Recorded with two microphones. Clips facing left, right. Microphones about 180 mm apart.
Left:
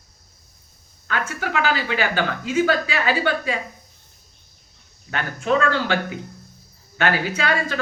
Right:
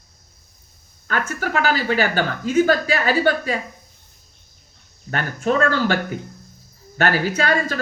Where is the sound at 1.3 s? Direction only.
40° right (ahead or behind).